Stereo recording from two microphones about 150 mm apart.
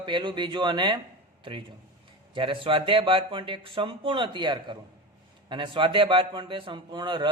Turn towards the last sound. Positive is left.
turn(degrees=-30)  # may be behind; listen again after turning